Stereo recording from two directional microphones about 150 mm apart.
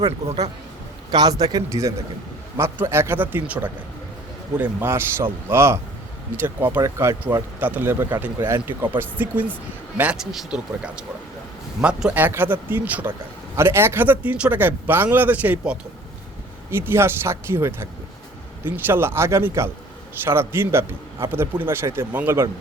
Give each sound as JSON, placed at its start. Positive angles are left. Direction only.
{"t": 0.3, "sound": "speech", "side_deg": -45}
{"t": 1.1, "sound": "a man's voice", "side_deg": -25}